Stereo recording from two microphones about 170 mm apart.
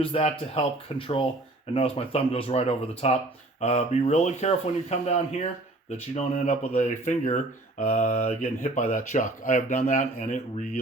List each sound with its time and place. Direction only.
0.0 s speech: 35° left (ahead or behind)